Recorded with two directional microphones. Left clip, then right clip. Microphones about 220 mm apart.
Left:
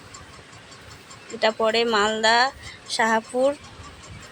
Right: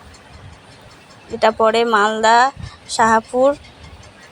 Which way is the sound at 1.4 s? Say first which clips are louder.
Right 7 dB; 15° right (ahead or behind).